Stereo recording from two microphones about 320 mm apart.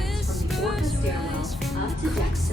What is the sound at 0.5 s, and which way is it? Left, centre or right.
Music, centre.